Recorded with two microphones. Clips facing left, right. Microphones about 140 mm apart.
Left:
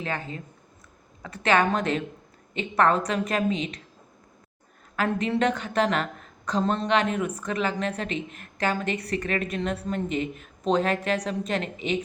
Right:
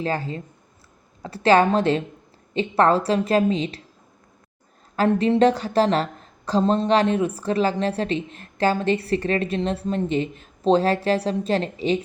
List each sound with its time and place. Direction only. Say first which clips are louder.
0.0 s a woman's voice: right 6 dB; 35° right (ahead or behind)
4.9 s a woman's voice: right 7 dB; 30° right (ahead or behind)